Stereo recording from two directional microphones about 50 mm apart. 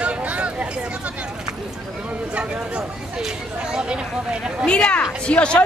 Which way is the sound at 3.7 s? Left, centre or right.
Centre.